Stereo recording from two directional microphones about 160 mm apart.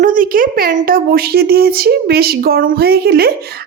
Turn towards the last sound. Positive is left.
turn(degrees=-75)  # may be behind; listen again after turning